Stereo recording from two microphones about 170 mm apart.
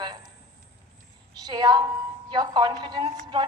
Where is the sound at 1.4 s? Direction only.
25° right (ahead or behind).